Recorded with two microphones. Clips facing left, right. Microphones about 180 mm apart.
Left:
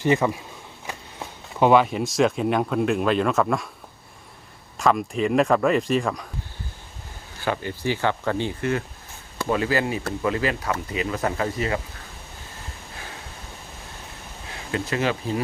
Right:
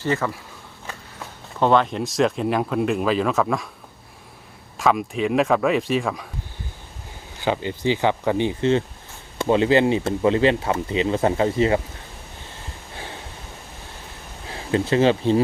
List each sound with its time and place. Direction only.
0.0 s speech: 15° left (ahead or behind)
1.5 s speech: 10° left (ahead or behind)
4.8 s speech: centre (ahead or behind)
7.4 s speech: 20° right (ahead or behind)
14.5 s speech: 30° right (ahead or behind)